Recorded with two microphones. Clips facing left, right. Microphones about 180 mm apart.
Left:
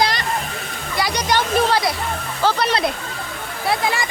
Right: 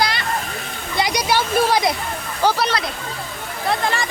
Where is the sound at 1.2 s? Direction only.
10° right (ahead or behind).